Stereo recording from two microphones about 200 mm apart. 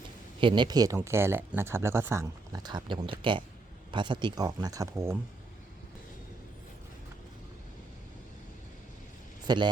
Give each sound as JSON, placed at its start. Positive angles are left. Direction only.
{"t": 0.3, "sound": "speech", "side_deg": -25}
{"t": 9.5, "sound": "speech", "side_deg": -20}